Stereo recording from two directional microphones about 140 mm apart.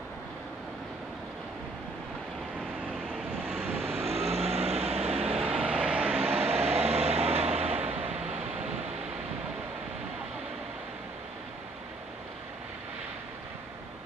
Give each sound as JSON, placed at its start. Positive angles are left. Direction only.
{"t": 3.4, "sound": "vehicle", "side_deg": -15}
{"t": 4.0, "sound": "vehicle", "side_deg": -45}
{"t": 5.5, "sound": "vehicle", "side_deg": -5}
{"t": 6.4, "sound": "vehicle", "side_deg": -45}